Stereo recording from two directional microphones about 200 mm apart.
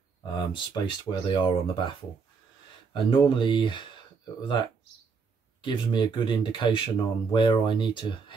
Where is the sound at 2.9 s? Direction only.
25° left (ahead or behind).